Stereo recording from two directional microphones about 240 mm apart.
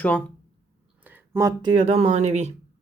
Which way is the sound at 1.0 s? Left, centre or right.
Centre.